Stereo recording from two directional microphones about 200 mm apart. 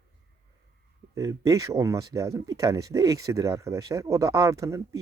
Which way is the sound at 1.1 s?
15° right (ahead or behind).